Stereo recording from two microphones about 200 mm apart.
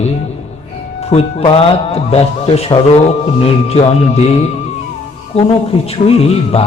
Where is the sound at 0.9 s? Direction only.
30° left (ahead or behind).